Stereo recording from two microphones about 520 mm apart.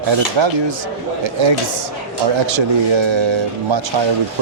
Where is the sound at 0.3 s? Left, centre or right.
Right.